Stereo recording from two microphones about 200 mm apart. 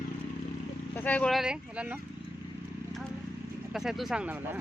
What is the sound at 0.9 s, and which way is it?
Speech, 5° left (ahead or behind).